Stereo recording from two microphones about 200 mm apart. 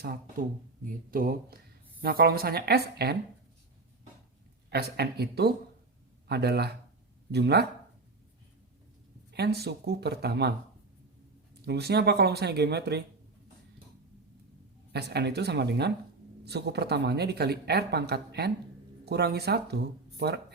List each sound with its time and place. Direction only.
0.0 s speech: 50° right (ahead or behind)
4.7 s speech: 55° right (ahead or behind)
9.3 s speech: 55° right (ahead or behind)
11.6 s speech: 55° right (ahead or behind)
14.9 s speech: 55° right (ahead or behind)